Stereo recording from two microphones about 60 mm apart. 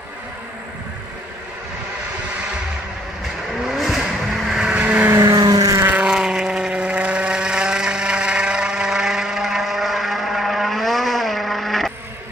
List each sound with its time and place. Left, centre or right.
3.6 s vehicle: centre
4.7 s vehicle: right
5.1 s vehicle: right
6.0 s vehicle: centre